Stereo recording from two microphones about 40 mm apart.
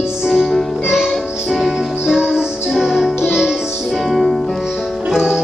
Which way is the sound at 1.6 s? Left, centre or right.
Centre.